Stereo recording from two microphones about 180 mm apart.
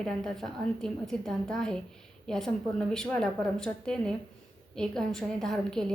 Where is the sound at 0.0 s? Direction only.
5° left (ahead or behind).